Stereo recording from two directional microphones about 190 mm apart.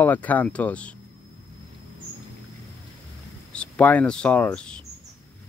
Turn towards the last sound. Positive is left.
turn(degrees=5)  # may be behind; listen again after turning